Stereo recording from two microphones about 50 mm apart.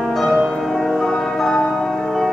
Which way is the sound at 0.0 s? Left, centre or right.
Centre.